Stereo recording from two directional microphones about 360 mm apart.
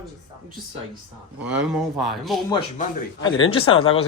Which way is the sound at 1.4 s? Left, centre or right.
Right.